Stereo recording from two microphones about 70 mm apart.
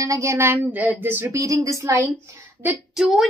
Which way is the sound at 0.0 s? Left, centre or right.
Right.